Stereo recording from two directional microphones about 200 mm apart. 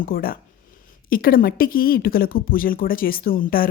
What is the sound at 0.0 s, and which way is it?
Speech, 45° left (ahead or behind).